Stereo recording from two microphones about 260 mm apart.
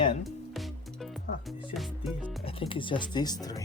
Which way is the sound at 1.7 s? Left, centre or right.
Centre.